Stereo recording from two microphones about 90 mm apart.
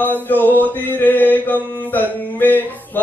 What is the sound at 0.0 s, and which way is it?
Mantra, 20° left (ahead or behind).